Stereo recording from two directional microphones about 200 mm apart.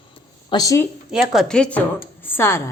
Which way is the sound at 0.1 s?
20° left (ahead or behind).